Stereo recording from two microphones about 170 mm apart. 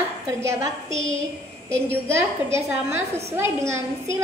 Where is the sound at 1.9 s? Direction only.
15° right (ahead or behind).